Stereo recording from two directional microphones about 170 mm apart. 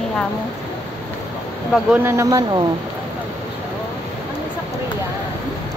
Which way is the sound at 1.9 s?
15° right (ahead or behind).